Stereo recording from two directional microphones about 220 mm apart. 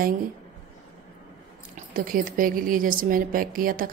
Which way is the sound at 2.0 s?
40° right (ahead or behind).